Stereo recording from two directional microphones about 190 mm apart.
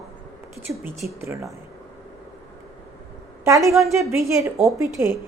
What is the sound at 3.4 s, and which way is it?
A woman's voice, 15° right (ahead or behind).